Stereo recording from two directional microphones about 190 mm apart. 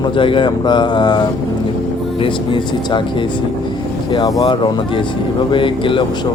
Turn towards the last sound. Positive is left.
turn(degrees=25)  # may be behind; listen again after turning